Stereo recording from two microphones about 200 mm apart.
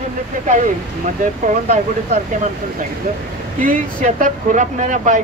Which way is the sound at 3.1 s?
40° right (ahead or behind).